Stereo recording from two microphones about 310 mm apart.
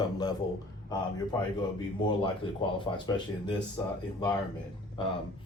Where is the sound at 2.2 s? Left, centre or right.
Centre.